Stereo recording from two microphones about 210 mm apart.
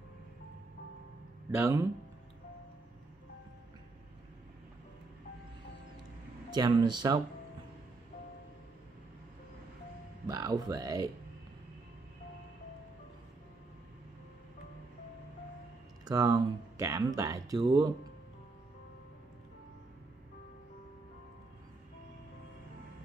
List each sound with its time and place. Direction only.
1.6 s speech: 15° right (ahead or behind)
6.5 s speech: 20° right (ahead or behind)
10.2 s speech: 20° right (ahead or behind)
16.1 s speech: 15° right (ahead or behind)